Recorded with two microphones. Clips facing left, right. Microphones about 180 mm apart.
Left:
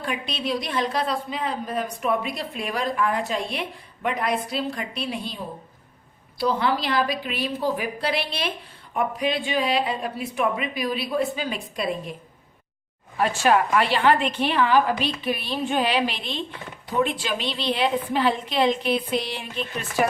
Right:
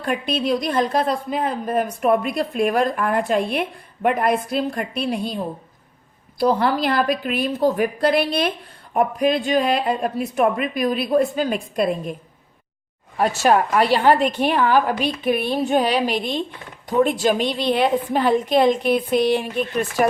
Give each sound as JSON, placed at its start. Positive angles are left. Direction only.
{"t": 0.0, "sound": "a woman's voice", "side_deg": -50}
{"t": 6.4, "sound": "a woman's voice", "side_deg": -50}
{"t": 13.1, "sound": "a woman's voice", "side_deg": -40}